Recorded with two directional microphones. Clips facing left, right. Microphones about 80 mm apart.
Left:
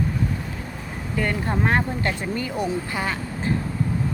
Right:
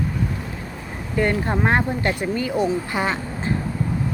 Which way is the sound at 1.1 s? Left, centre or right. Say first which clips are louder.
Right 4 dB; right.